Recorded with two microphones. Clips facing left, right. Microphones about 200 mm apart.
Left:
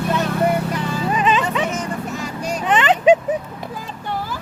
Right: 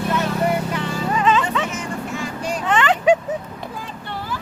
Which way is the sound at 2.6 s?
20° left (ahead or behind).